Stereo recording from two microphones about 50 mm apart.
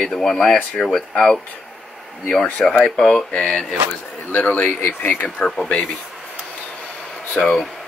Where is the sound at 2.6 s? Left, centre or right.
Centre.